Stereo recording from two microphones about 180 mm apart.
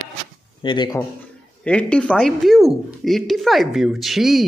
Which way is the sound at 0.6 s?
25° left (ahead or behind).